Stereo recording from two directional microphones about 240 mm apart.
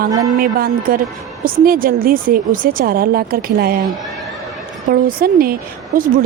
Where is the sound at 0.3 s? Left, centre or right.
Right.